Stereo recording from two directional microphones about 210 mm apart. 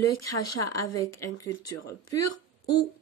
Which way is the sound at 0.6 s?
15° left (ahead or behind).